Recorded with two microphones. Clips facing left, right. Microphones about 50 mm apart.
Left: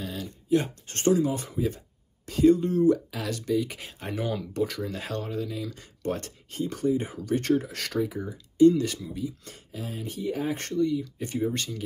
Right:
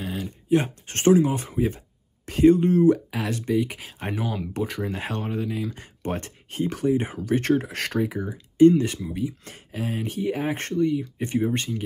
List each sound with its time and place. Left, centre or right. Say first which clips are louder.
0.0 s speech: right 4 dB; right
6.6 s speech: right 3 dB; right
9.1 s speech: right 4 dB; right